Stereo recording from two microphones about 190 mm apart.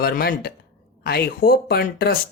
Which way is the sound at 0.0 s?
55° left (ahead or behind).